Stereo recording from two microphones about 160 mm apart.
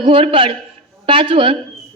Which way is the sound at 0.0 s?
35° right (ahead or behind).